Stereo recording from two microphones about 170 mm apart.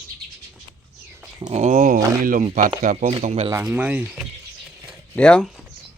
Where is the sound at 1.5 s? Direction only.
45° right (ahead or behind).